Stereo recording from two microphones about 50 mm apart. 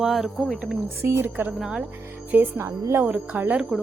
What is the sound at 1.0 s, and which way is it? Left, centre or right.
Speech, right.